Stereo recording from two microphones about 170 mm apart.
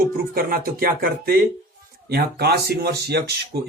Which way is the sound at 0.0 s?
60° right (ahead or behind).